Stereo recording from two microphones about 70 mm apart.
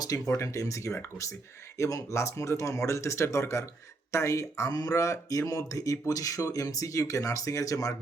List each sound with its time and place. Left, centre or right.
0.3 s speech: left
4.7 s speech: left